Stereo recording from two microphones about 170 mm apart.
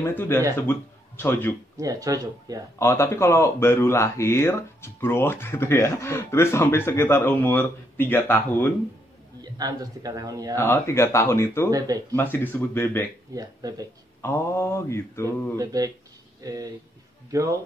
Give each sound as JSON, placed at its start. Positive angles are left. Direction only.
{"t": 0.0, "sound": "speech", "side_deg": 15}
{"t": 1.8, "sound": "a man's voice", "side_deg": -20}
{"t": 2.8, "sound": "speech", "side_deg": 15}
{"t": 9.4, "sound": "a man's voice", "side_deg": -20}
{"t": 10.5, "sound": "speech", "side_deg": 15}
{"t": 13.3, "sound": "a man's voice", "side_deg": -20}
{"t": 14.2, "sound": "speech", "side_deg": 15}
{"t": 15.2, "sound": "a man's voice", "side_deg": -20}